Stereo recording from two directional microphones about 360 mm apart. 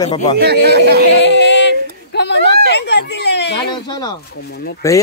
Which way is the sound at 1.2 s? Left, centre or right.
Left.